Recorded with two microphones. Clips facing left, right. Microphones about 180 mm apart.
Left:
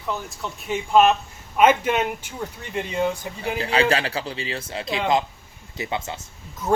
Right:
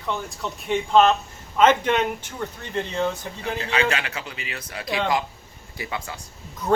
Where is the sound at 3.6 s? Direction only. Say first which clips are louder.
Left 4 dB; 30° left (ahead or behind).